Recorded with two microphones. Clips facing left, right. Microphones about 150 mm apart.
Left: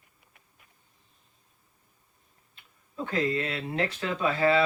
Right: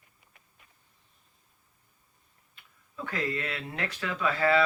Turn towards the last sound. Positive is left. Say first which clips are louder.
# left 1 dB
turn(degrees=25)  # may be behind; listen again after turning